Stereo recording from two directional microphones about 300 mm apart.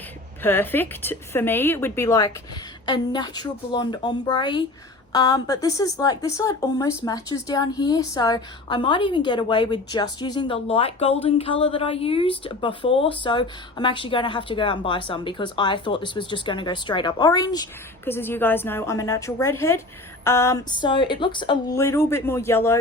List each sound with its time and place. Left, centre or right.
0.4 s speech: centre